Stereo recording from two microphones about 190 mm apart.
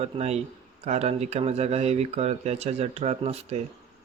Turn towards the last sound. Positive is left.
turn(degrees=-35)  # may be behind; listen again after turning